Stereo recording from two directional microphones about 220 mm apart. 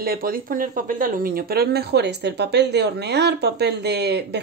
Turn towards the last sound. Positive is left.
turn(degrees=-50)  # may be behind; listen again after turning